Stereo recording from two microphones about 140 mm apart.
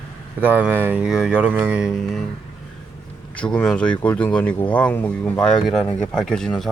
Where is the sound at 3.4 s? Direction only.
5° left (ahead or behind).